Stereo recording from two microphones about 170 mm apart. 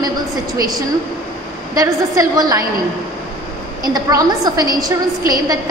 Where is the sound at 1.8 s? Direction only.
20° right (ahead or behind).